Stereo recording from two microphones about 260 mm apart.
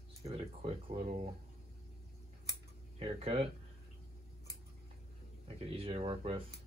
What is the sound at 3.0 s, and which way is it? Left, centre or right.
Speech, right.